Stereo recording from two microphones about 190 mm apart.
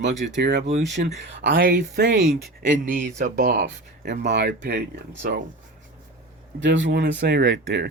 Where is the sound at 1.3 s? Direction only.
65° right (ahead or behind).